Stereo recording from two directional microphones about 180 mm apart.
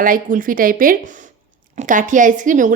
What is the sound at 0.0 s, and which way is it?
A woman's voice, 50° right (ahead or behind).